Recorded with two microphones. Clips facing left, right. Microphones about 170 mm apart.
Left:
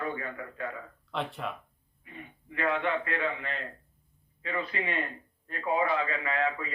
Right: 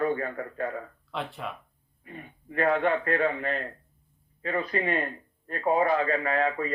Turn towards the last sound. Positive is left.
turn(degrees=-45)  # may be behind; listen again after turning